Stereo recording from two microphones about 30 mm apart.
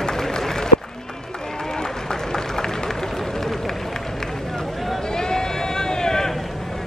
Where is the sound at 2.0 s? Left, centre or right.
Left.